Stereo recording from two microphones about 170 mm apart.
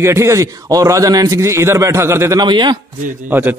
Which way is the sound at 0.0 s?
15° right (ahead or behind).